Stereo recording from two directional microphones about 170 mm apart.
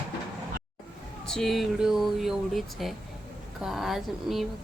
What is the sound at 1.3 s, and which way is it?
Speech, centre (ahead or behind).